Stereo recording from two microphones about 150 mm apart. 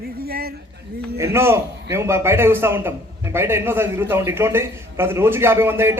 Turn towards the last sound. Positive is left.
turn(degrees=-15)  # may be behind; listen again after turning